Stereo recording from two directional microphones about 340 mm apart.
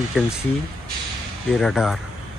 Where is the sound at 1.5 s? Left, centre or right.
Centre.